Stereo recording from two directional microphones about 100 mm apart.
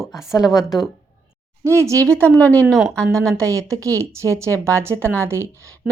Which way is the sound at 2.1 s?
15° left (ahead or behind).